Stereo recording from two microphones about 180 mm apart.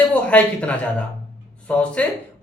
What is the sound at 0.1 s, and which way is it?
Speech, 5° left (ahead or behind).